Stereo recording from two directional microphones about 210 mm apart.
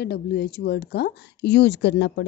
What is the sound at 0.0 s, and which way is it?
Speech, 50° left (ahead or behind).